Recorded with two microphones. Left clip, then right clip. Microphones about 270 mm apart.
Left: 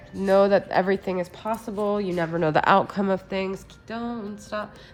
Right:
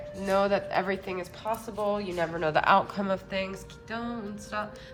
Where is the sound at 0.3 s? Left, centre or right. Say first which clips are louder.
Left 7 dB; left.